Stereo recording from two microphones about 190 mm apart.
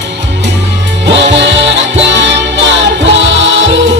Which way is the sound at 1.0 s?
70° right (ahead or behind).